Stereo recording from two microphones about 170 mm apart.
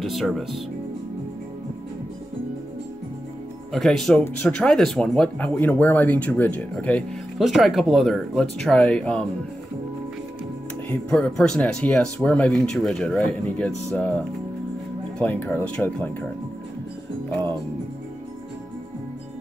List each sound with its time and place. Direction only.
0.0 s speech: centre (ahead or behind)
3.7 s speech: centre (ahead or behind)
10.9 s speech: 10° left (ahead or behind)
17.3 s speech: 10° left (ahead or behind)